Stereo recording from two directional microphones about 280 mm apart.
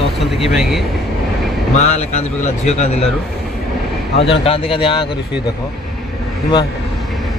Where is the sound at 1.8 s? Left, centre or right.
Left.